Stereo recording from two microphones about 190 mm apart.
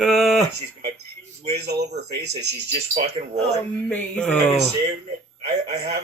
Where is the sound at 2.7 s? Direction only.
35° right (ahead or behind).